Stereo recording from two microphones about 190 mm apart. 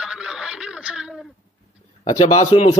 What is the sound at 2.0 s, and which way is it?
Speech, 20° left (ahead or behind).